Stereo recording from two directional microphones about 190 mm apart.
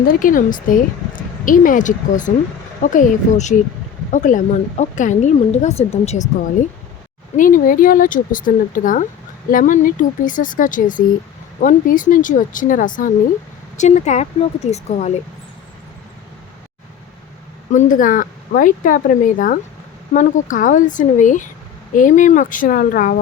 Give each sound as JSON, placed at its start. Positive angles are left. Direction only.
{"t": 0.0, "sound": "a woman's voice", "side_deg": 50}
{"t": 7.3, "sound": "a woman's voice", "side_deg": 45}
{"t": 17.7, "sound": "speech", "side_deg": 40}